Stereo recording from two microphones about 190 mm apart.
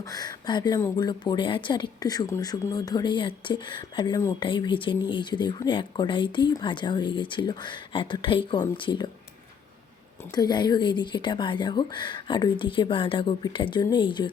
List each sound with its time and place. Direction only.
0.0 s speech: 20° left (ahead or behind)
10.3 s speech: 20° left (ahead or behind)